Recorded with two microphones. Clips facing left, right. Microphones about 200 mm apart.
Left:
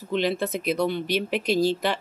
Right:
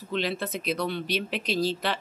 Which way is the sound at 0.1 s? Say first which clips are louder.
Left 5 dB; 15° left (ahead or behind).